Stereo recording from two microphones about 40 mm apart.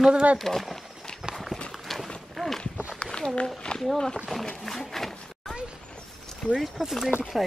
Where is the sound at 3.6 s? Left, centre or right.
Centre.